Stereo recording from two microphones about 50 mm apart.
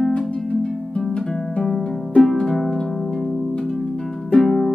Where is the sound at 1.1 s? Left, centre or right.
Centre.